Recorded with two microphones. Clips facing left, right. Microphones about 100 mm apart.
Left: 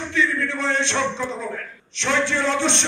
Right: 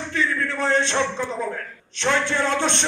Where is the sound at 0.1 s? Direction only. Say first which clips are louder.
Left 1 dB; 45° right (ahead or behind).